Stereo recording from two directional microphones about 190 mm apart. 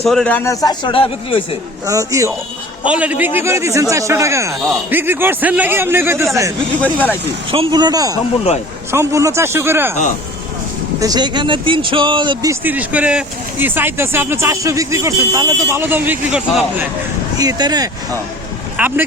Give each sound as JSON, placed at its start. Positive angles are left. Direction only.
{"t": 0.0, "sound": "a man's voice", "side_deg": 0}
{"t": 0.6, "sound": "speech", "side_deg": 25}
{"t": 1.9, "sound": "speech", "side_deg": -15}
{"t": 6.8, "sound": "speech", "side_deg": 10}
{"t": 7.5, "sound": "speech", "side_deg": -25}
{"t": 11.0, "sound": "speech", "side_deg": -20}
{"t": 17.3, "sound": "speech", "side_deg": -20}
{"t": 18.8, "sound": "speech", "side_deg": -10}